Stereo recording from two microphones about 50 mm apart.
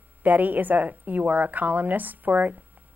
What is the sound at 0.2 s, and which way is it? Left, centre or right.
A woman's voice, right.